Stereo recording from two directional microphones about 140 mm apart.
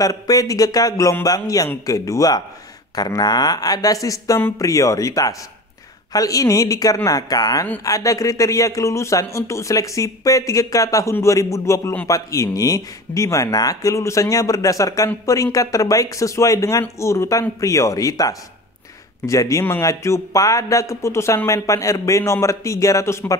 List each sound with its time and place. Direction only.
0.0 s speech: 25° left (ahead or behind)